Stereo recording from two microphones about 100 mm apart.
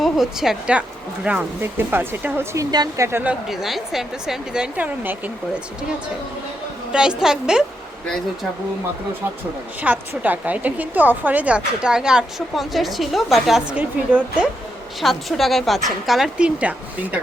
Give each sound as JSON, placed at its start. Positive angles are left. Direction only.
{"t": 0.0, "sound": "a woman's voice", "side_deg": -5}
{"t": 2.7, "sound": "speech", "side_deg": -40}
{"t": 3.1, "sound": "speech", "side_deg": -20}
{"t": 3.5, "sound": "speech", "side_deg": -5}
{"t": 6.9, "sound": "a woman's voice", "side_deg": -10}
{"t": 9.8, "sound": "a woman's voice", "side_deg": -15}
{"t": 13.7, "sound": "a woman's voice", "side_deg": -15}
{"t": 15.0, "sound": "speech", "side_deg": 0}